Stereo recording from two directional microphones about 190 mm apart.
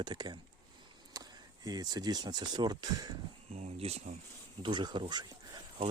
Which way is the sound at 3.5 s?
35° right (ahead or behind).